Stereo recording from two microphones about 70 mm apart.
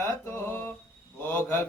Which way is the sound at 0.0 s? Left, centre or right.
Left.